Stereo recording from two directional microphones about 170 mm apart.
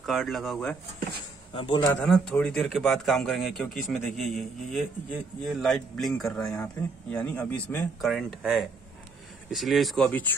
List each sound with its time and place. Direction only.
0.0 s speech: centre (ahead or behind)
1.5 s a man's voice: 30° left (ahead or behind)
1.8 s a man's voice: 15° left (ahead or behind)
2.0 s speech: 5° left (ahead or behind)